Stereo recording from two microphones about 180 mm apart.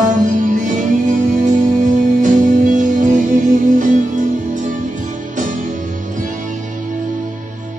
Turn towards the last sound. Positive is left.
turn(degrees=-45)  # may be behind; listen again after turning